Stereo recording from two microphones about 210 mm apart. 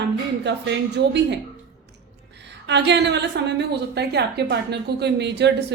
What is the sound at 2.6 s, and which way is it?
A woman's voice, 55° right (ahead or behind).